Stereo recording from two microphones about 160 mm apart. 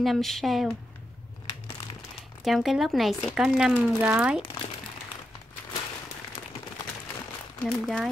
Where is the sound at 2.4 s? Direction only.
Centre (ahead or behind).